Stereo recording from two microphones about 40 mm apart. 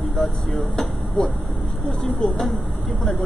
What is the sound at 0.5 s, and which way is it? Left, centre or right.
Speech, centre.